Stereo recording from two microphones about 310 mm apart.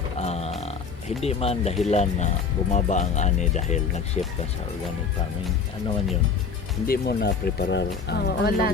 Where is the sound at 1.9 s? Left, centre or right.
Left.